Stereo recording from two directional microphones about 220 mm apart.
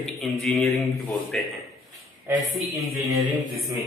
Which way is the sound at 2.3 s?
30° right (ahead or behind).